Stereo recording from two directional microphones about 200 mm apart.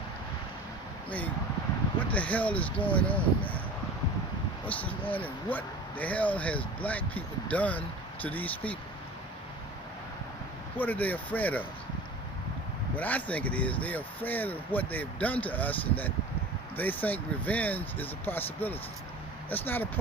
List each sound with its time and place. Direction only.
2.1 s speech: 5° left (ahead or behind)
4.6 s speech: 5° left (ahead or behind)
10.8 s speech: 10° left (ahead or behind)
13.0 s speech: 10° left (ahead or behind)